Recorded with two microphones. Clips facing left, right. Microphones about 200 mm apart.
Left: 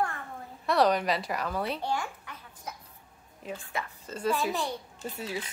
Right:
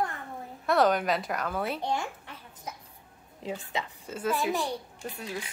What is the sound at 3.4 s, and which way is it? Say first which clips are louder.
Speech: right 2 dB; 20° right (ahead or behind).